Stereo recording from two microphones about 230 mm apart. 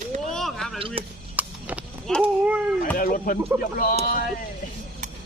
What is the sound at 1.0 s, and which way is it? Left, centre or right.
Speech, right.